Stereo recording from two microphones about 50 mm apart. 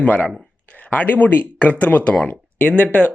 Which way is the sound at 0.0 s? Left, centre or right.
Left.